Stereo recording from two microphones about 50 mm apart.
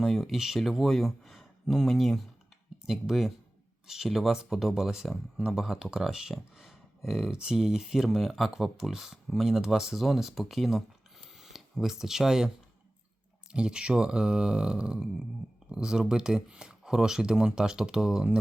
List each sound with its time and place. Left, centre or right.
0.0 s speech: centre
13.5 s speech: centre